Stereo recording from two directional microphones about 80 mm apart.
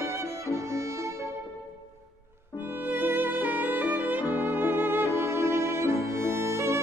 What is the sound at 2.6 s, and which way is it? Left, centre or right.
Music, right.